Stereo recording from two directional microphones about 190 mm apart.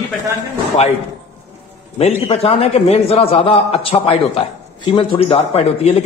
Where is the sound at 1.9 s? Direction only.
35° left (ahead or behind).